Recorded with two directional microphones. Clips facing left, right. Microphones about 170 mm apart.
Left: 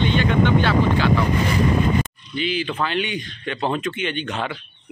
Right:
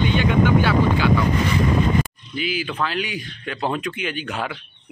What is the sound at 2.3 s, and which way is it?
Speech, 5° right (ahead or behind).